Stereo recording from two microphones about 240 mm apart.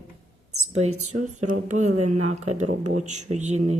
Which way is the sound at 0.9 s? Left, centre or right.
Right.